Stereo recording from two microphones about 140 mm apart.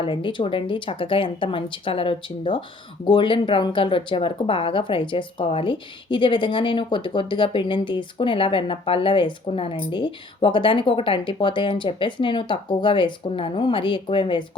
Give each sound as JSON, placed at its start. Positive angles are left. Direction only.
{"t": 0.0, "sound": "speech", "side_deg": 35}